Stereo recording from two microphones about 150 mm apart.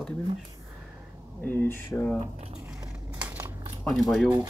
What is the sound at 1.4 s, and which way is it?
Speech, 10° left (ahead or behind).